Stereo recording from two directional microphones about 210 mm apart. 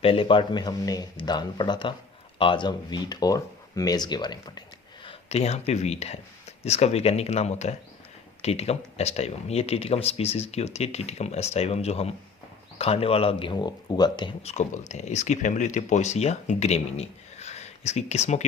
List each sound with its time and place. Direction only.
0.0 s speech: 25° left (ahead or behind)
5.0 s speech: 30° left (ahead or behind)